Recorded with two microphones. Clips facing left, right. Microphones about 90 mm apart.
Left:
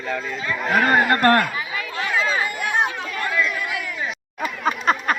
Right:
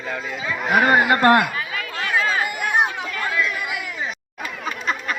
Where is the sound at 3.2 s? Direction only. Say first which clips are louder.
Left 1 dB; centre (ahead or behind).